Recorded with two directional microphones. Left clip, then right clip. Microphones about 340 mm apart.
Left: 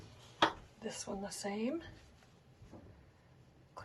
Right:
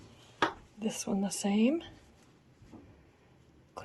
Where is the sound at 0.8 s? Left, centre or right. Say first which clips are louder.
Right 7 dB; right.